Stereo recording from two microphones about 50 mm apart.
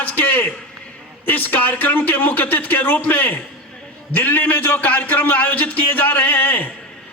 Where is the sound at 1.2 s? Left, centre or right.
Left.